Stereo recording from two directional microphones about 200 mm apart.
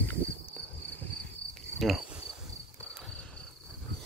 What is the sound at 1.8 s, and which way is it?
Cricket, centre (ahead or behind).